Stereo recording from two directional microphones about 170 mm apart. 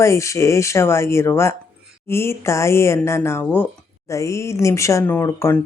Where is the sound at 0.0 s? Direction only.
15° left (ahead or behind).